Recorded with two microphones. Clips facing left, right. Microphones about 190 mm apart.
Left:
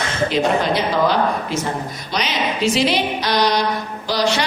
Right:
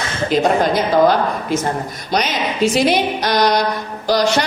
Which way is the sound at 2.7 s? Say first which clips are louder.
Right 3 dB; 50° right (ahead or behind).